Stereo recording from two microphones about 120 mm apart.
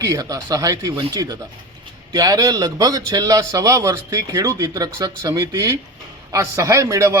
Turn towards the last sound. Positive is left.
turn(degrees=-25)  # may be behind; listen again after turning